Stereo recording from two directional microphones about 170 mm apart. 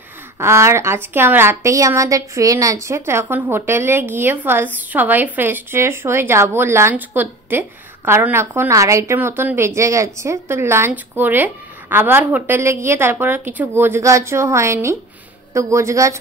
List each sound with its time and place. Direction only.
0.4 s a woman's voice: 15° right (ahead or behind)